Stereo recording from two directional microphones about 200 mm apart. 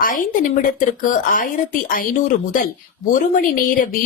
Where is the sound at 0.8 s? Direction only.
40° left (ahead or behind).